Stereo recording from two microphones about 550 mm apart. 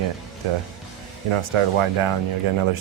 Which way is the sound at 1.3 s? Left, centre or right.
Right.